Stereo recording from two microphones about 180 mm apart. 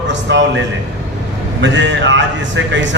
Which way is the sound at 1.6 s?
85° right.